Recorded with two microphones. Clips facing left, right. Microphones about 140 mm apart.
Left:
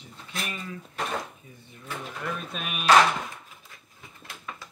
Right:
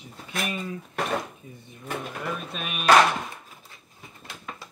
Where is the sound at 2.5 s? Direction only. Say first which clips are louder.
Right 1 dB; centre (ahead or behind).